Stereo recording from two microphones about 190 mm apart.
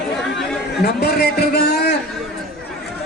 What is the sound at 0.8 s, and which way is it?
Speech, 55° left (ahead or behind).